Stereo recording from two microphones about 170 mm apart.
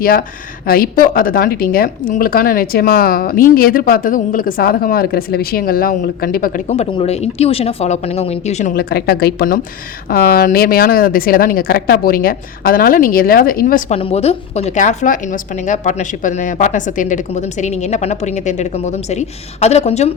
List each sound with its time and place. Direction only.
0.0 s a woman's voice: 60° left (ahead or behind)
6.7 s speech: 35° left (ahead or behind)
8.7 s a woman's voice: 60° left (ahead or behind)
13.9 s a woman's voice: 35° left (ahead or behind)